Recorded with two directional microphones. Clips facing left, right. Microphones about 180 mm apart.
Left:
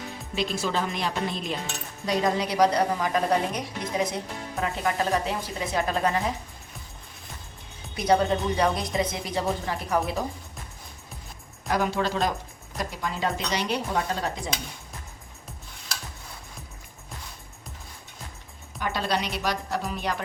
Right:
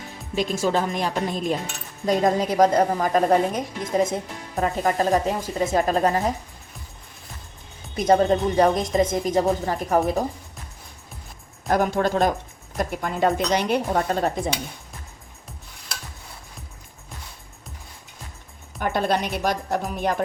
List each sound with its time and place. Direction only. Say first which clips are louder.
0.3 s speech: right 5 dB; 45° right (ahead or behind)
7.9 s speech: right 4 dB; 45° right (ahead or behind)
11.7 s speech: right 5 dB; 50° right (ahead or behind)
18.8 s speech: right 5 dB; 50° right (ahead or behind)